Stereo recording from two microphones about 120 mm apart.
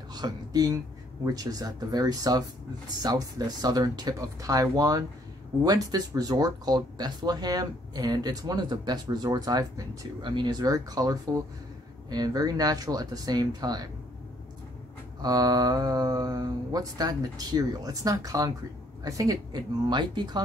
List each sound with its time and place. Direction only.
0.1 s speech: 35° right (ahead or behind)
15.2 s speech: 30° right (ahead or behind)